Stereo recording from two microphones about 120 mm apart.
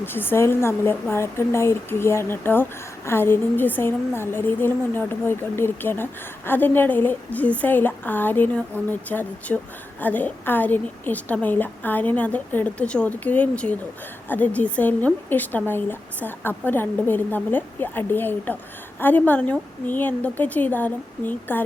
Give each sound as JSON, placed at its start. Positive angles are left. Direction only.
{"t": 0.0, "sound": "a woman's voice", "side_deg": 15}